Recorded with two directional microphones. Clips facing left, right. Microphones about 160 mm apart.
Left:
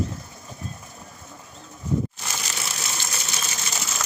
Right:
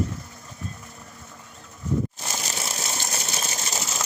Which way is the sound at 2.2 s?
40° right (ahead or behind).